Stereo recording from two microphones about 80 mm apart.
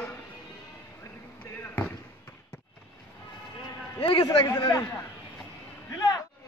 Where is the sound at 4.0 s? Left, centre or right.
Left.